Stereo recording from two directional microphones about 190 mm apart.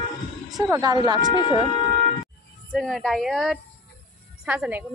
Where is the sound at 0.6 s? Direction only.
15° right (ahead or behind).